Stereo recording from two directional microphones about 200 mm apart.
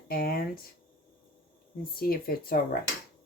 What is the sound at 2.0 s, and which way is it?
Speech, 50° left (ahead or behind).